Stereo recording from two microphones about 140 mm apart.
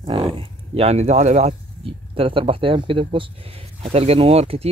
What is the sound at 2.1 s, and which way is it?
Speech, 40° right (ahead or behind).